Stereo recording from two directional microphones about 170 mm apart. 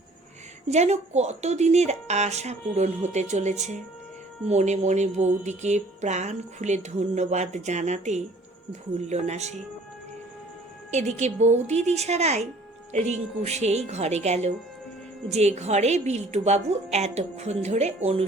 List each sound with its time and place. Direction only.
0.7 s speech: 40° right (ahead or behind)
10.9 s speech: 40° right (ahead or behind)